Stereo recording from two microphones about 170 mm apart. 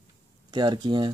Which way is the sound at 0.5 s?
25° right (ahead or behind).